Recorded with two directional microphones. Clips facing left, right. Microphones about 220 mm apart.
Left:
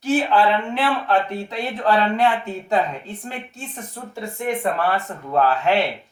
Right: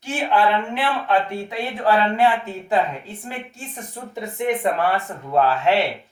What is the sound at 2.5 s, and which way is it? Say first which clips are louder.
Speech: even; centre (ahead or behind).